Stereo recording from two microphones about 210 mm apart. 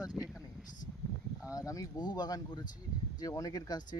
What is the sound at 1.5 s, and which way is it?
Speech, 15° left (ahead or behind).